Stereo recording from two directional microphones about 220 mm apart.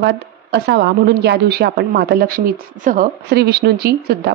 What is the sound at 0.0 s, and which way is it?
A woman's voice, 50° right (ahead or behind).